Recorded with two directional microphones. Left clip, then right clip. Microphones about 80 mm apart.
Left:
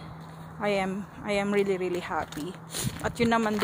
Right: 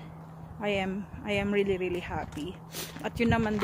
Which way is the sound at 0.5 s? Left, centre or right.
Right.